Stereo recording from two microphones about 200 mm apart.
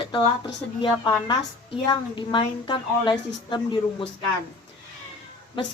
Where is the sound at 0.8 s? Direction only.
25° left (ahead or behind).